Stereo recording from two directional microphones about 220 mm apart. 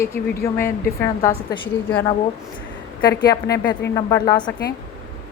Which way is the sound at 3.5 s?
50° left (ahead or behind).